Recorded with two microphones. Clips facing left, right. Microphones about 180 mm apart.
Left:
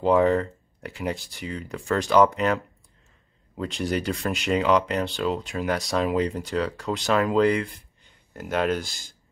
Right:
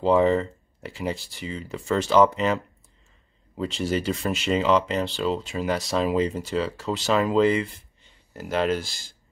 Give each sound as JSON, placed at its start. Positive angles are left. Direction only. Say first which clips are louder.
{"t": 0.0, "sound": "speech", "louder": "even", "side_deg": 0}